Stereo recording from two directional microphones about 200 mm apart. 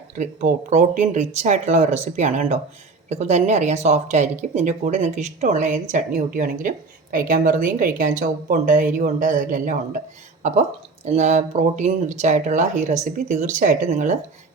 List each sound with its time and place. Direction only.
0.2 s a woman's voice: 35° right (ahead or behind)